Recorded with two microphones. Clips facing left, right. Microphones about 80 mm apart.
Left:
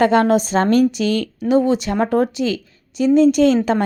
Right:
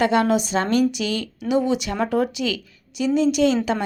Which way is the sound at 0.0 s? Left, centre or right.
Left.